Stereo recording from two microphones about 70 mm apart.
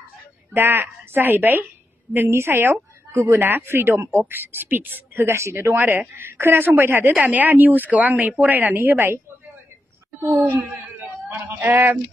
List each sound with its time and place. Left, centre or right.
0.5 s a woman's voice: right
10.3 s speech: right